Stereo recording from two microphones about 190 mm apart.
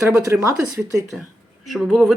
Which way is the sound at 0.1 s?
15° right (ahead or behind).